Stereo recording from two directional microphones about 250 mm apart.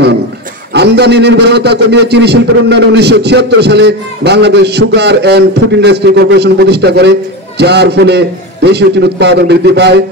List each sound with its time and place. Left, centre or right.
0.7 s a man's voice: right